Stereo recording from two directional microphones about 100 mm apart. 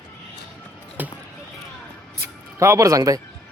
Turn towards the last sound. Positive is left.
turn(degrees=-35)  # may be behind; listen again after turning